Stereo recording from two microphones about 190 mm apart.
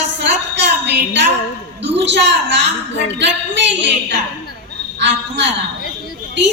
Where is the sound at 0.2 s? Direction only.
65° right (ahead or behind).